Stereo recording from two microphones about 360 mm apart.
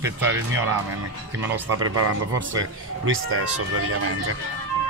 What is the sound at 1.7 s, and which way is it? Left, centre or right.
Speech, right.